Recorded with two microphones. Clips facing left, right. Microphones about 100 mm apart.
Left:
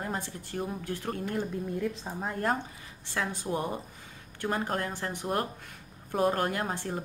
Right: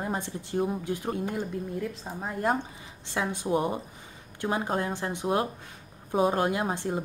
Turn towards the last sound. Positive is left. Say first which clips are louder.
# right 4 dB
turn(degrees=-15)  # may be behind; listen again after turning